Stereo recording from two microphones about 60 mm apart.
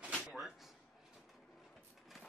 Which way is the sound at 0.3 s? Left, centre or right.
Centre.